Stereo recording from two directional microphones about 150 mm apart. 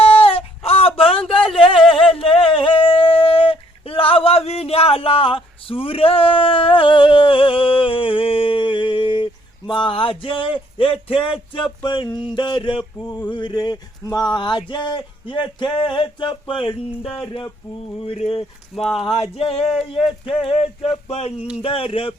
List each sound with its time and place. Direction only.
0.0 s a sound: 40° left (ahead or behind)
11.9 s male singing: 30° left (ahead or behind)
13.3 s speech: 30° left (ahead or behind)
14.3 s male singing: 30° left (ahead or behind)